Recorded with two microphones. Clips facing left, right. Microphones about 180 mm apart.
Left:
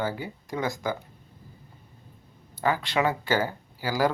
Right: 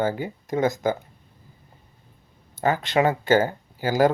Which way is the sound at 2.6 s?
45° right (ahead or behind).